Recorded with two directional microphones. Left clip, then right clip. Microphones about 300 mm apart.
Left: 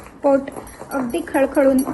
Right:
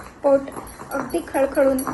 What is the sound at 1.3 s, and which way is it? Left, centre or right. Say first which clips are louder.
Speech: left 2 dB; left.